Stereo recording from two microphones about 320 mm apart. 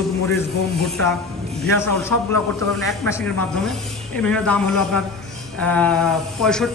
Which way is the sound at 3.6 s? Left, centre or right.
Centre.